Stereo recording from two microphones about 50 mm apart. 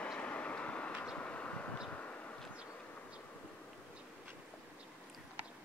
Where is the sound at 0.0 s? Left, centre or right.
Left.